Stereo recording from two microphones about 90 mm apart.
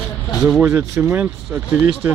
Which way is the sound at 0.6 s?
25° right (ahead or behind).